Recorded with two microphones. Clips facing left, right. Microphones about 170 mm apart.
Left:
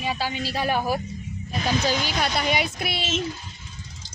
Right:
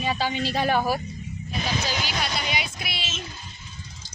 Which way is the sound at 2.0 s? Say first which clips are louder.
Left 4 dB; 50° left (ahead or behind).